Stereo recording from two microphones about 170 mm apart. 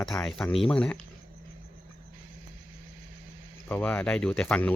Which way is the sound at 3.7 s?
10° left (ahead or behind).